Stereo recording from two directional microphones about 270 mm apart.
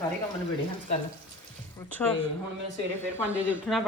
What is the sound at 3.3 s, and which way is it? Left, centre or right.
Speech, centre.